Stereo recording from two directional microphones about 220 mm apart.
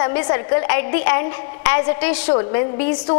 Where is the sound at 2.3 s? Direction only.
25° left (ahead or behind).